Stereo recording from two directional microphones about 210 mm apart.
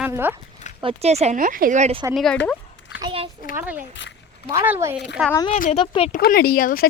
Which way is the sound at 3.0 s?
25° right (ahead or behind).